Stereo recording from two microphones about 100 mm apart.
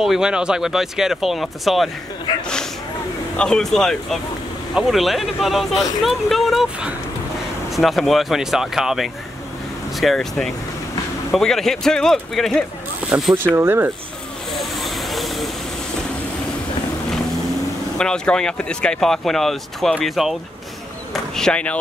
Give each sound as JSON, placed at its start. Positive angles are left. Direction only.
{"t": 0.0, "sound": "speech", "side_deg": -5}
{"t": 3.3, "sound": "speech", "side_deg": 5}
{"t": 13.1, "sound": "speech", "side_deg": -10}
{"t": 13.6, "sound": "speech", "side_deg": -20}
{"t": 14.5, "sound": "vehicle", "side_deg": 0}
{"t": 17.9, "sound": "speech", "side_deg": 5}